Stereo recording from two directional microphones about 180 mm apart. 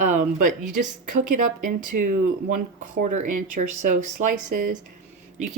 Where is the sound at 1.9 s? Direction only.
55° right (ahead or behind).